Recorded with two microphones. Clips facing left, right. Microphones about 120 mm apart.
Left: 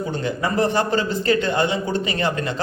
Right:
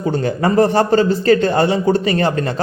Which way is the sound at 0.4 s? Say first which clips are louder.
Right 7 dB; 40° right (ahead or behind).